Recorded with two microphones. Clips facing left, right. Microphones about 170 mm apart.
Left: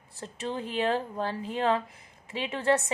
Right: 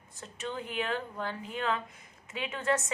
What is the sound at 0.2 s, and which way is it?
A woman's voice, 30° left (ahead or behind).